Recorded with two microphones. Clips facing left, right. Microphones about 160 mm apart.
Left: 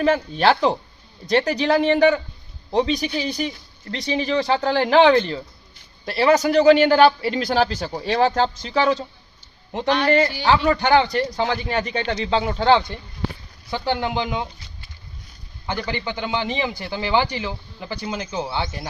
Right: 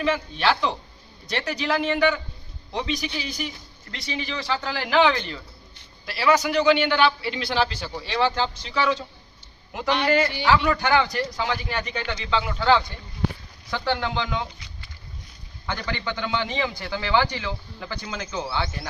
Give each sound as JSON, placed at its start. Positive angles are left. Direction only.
{"t": 0.0, "sound": "a man's voice", "side_deg": 40}
{"t": 10.1, "sound": "a man's voice", "side_deg": 30}
{"t": 13.7, "sound": "a man's voice", "side_deg": 20}